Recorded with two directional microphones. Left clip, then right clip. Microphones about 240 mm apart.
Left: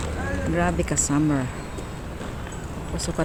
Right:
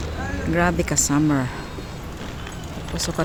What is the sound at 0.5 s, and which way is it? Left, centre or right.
Speech, centre.